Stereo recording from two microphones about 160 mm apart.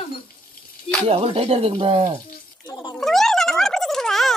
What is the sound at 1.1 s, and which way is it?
Speech, 40° right (ahead or behind).